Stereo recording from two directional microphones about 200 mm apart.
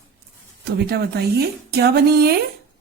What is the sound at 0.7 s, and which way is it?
Speech, 55° right (ahead or behind).